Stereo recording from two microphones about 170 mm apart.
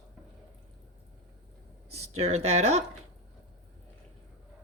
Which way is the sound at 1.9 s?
40° right (ahead or behind).